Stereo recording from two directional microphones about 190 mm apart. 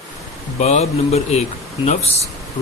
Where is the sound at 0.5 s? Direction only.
35° left (ahead or behind).